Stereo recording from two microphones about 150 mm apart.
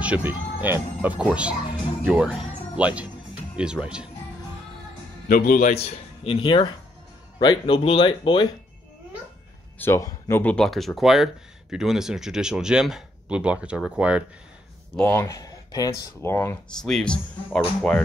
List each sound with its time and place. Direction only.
0.0 s speech: 10° right (ahead or behind)
5.3 s a man's voice: 70° left (ahead or behind)
5.7 s speech: 45° left (ahead or behind)
9.8 s speech: 20° left (ahead or behind); by 14.2 s 10° right (ahead or behind)
15.0 s speech: 15° left (ahead or behind)
16.8 s speech: 5° left (ahead or behind)